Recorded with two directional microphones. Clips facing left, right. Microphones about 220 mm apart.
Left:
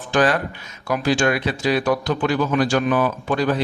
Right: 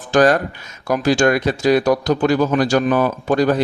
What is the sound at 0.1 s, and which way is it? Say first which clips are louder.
Speech: right 5 dB; 45° right (ahead or behind).